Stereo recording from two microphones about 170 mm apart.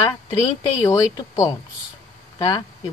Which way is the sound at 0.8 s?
20° left (ahead or behind).